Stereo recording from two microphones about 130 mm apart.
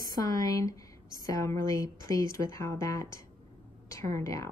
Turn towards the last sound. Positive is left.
turn(degrees=25)  # may be behind; listen again after turning